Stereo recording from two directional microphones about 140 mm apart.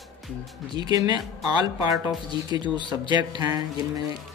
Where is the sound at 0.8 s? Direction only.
30° right (ahead or behind).